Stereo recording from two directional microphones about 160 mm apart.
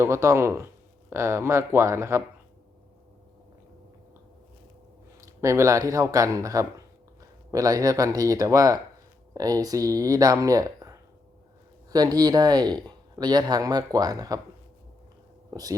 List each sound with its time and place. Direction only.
0.0 s speech: 20° right (ahead or behind)
5.2 s speech: 20° right (ahead or behind)
15.4 s a sound: 25° right (ahead or behind)